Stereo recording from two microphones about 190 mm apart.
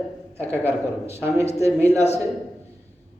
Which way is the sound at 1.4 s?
35° left (ahead or behind).